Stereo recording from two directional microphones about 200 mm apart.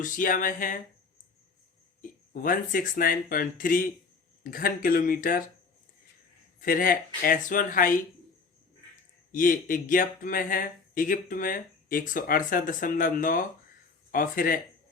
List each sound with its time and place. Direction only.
0.0 s a sound: 40° left (ahead or behind)
2.0 s speech: 45° left (ahead or behind)
6.6 s speech: 45° left (ahead or behind)
9.3 s speech: 45° left (ahead or behind)